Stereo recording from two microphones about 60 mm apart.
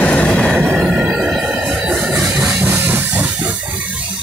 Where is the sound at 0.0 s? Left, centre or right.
Left.